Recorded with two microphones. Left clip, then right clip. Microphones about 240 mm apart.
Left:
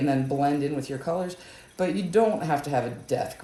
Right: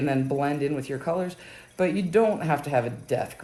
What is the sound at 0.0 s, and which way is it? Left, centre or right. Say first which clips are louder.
Speech: left 1 dB; right.